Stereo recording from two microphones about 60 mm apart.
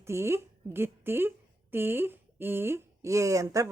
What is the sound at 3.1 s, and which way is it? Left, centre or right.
Speech, right.